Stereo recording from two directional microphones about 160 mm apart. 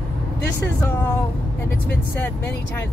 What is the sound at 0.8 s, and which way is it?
Speech, 15° left (ahead or behind).